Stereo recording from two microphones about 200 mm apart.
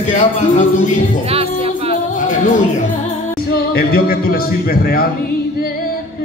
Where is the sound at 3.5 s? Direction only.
50° left (ahead or behind).